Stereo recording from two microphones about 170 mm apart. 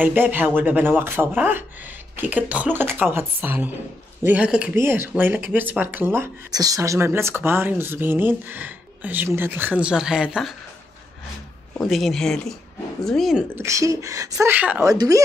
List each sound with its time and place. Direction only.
0.0 s speech: 10° right (ahead or behind)
11.8 s speech: centre (ahead or behind)
13.6 s speech: 20° right (ahead or behind)